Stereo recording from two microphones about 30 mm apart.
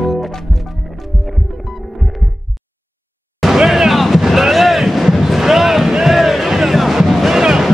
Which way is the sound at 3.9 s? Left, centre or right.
Centre.